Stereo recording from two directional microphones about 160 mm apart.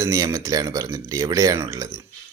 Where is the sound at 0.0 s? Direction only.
20° right (ahead or behind).